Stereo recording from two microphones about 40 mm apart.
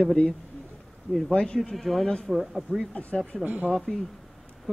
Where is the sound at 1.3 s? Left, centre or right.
Left.